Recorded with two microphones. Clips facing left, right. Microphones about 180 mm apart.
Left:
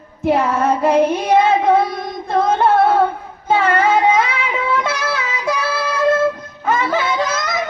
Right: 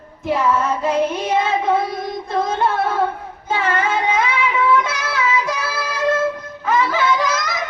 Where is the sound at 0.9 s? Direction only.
35° left (ahead or behind).